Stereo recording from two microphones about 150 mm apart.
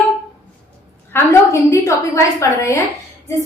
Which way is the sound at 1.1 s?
20° left (ahead or behind).